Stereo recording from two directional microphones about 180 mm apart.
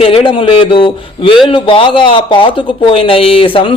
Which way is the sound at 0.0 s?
30° left (ahead or behind).